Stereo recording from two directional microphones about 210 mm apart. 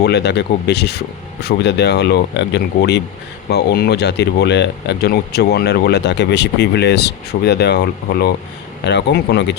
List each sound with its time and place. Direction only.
0.0 s speech: 50° left (ahead or behind)